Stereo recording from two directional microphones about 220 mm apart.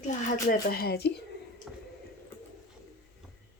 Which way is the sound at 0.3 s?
40° left (ahead or behind).